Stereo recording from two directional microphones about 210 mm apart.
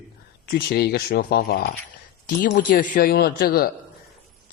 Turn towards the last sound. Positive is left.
turn(degrees=45)  # may be behind; listen again after turning